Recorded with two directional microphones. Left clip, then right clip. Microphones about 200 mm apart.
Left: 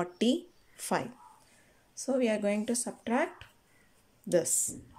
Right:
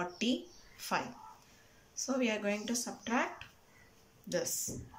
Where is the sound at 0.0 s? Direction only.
30° left (ahead or behind).